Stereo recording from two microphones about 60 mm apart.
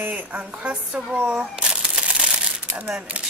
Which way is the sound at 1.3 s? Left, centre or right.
Centre.